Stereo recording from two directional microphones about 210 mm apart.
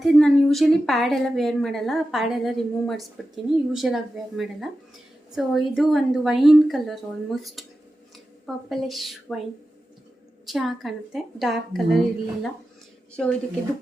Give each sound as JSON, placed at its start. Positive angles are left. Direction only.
{"t": 0.0, "sound": "a woman's voice", "side_deg": 0}
{"t": 10.4, "sound": "a woman's voice", "side_deg": 0}